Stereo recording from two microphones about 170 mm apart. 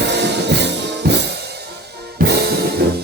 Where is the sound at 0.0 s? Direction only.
85° right.